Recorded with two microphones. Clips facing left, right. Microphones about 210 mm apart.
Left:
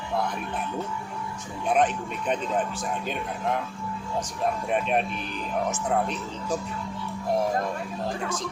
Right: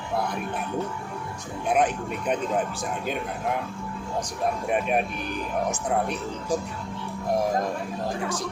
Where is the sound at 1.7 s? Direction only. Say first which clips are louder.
Even; 10° right (ahead or behind).